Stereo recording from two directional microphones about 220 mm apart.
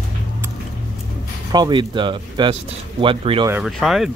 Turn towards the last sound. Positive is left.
turn(degrees=0)  # may be behind; listen again after turning